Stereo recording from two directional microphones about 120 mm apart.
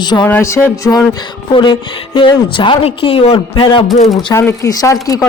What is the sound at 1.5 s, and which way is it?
A woman's voice, 40° left (ahead or behind).